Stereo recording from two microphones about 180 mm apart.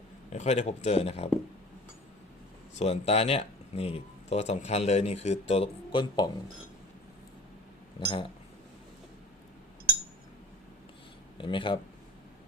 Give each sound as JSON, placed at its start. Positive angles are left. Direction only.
{"t": 0.3, "sound": "speech", "side_deg": 40}
{"t": 2.7, "sound": "speech", "side_deg": 35}
{"t": 7.9, "sound": "speech", "side_deg": 25}
{"t": 11.3, "sound": "speech", "side_deg": 25}